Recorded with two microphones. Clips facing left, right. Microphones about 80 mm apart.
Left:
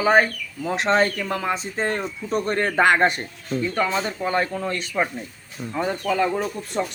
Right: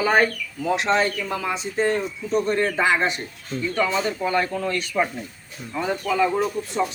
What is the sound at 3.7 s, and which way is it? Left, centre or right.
Speech, left.